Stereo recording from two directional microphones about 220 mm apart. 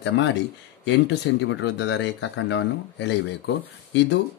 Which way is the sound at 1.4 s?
55° left (ahead or behind).